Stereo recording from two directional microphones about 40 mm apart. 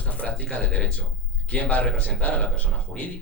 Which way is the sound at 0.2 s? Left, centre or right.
Left.